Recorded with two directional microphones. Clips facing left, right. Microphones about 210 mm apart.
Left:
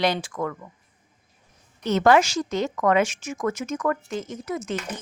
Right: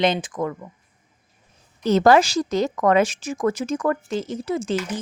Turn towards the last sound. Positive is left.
turn(degrees=-30)  # may be behind; listen again after turning